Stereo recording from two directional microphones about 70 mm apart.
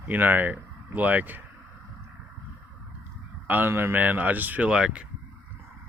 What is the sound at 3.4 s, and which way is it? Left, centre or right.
Speech, right.